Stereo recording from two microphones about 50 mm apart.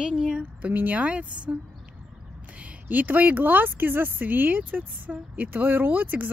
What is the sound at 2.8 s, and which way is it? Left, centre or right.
Speech, right.